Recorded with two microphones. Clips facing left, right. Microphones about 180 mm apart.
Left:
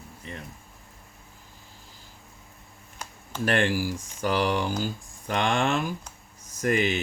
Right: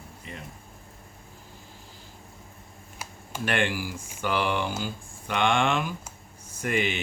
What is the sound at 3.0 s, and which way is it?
Computer keyboard, 5° right (ahead or behind).